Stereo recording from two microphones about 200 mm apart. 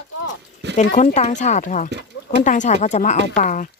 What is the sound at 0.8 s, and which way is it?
Speech, 40° left (ahead or behind).